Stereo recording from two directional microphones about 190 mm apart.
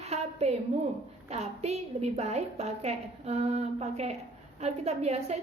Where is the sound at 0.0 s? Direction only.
35° right (ahead or behind).